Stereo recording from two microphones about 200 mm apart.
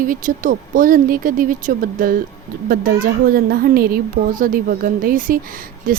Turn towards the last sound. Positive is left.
turn(degrees=-45)  # may be behind; listen again after turning